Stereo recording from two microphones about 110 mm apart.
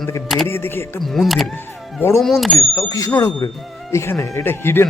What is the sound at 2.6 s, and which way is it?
Speech, 30° left (ahead or behind).